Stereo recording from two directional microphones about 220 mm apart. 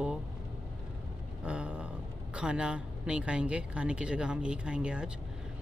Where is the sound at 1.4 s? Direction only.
5° right (ahead or behind).